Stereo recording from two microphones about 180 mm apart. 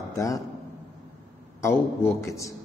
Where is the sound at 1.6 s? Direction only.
15° left (ahead or behind).